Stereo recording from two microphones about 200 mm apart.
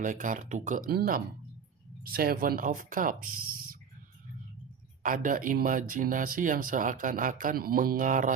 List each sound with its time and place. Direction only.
0.0 s speech: 40° right (ahead or behind)
5.0 s speech: 45° right (ahead or behind)